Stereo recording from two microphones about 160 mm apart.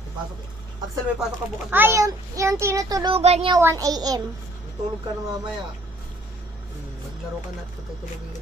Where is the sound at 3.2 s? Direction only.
40° right (ahead or behind).